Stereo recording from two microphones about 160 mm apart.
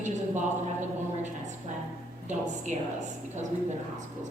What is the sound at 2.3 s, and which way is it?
Speech, 50° right (ahead or behind).